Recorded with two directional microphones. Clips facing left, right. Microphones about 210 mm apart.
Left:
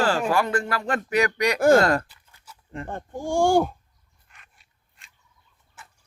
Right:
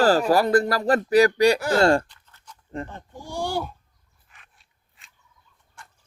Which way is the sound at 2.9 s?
50° left (ahead or behind).